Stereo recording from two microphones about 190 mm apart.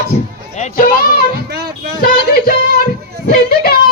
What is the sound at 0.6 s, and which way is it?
Speech, 45° left (ahead or behind).